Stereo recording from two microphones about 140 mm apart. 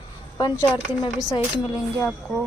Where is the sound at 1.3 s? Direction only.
25° left (ahead or behind).